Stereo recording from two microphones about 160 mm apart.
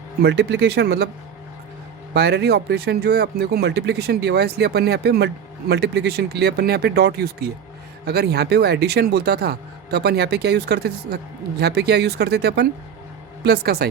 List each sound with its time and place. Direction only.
0.2 s speech: 90° right
2.1 s speech: 90° right